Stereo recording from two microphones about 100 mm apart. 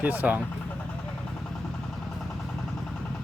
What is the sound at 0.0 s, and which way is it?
Speech, 20° right (ahead or behind).